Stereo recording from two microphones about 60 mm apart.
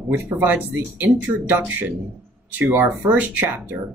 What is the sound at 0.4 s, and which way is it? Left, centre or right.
Speech, right.